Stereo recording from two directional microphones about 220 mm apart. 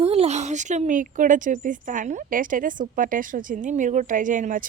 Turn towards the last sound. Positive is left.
turn(degrees=-35)  # may be behind; listen again after turning